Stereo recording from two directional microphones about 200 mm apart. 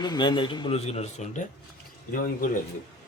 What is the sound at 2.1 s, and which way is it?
Speech, 45° left (ahead or behind).